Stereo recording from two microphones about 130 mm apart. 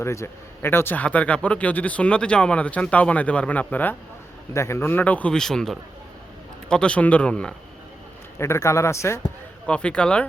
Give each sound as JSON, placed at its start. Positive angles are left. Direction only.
{"t": 0.0, "sound": "speech", "side_deg": 20}
{"t": 8.4, "sound": "speech", "side_deg": 20}
{"t": 9.6, "sound": "speech", "side_deg": 10}